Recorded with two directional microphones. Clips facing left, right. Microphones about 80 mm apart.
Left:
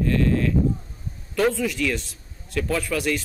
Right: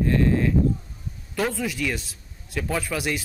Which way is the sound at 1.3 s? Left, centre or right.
Centre.